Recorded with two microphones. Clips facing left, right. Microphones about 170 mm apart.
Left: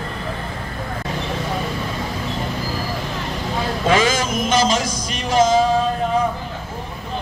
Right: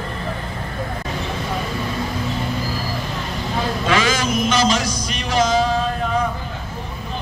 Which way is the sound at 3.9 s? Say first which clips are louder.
Left 1 dB; 45° left (ahead or behind).